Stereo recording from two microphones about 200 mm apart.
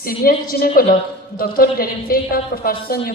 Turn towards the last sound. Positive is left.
turn(degrees=45)  # may be behind; listen again after turning